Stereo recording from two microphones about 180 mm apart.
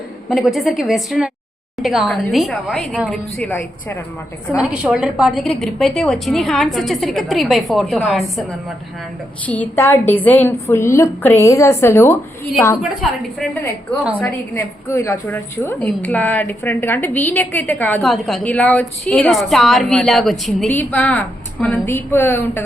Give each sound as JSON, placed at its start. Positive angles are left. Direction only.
{"t": 0.3, "sound": "a woman's voice", "side_deg": 0}
{"t": 4.5, "sound": "a woman's voice", "side_deg": -5}
{"t": 9.5, "sound": "a woman's voice", "side_deg": 10}
{"t": 14.2, "sound": "a woman's voice", "side_deg": 10}